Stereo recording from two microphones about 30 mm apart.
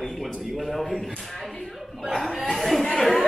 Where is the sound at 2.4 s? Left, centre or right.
Centre.